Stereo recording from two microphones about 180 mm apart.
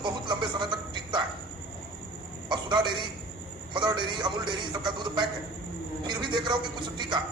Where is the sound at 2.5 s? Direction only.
25° right (ahead or behind).